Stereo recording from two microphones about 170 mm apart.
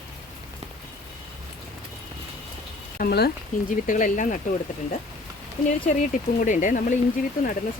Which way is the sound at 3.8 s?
50° left (ahead or behind).